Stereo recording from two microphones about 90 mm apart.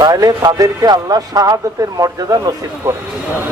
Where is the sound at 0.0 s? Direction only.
45° right (ahead or behind).